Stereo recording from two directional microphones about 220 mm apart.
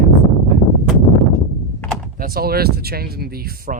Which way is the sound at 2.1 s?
40° right (ahead or behind).